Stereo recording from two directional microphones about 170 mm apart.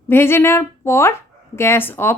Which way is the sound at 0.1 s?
15° left (ahead or behind).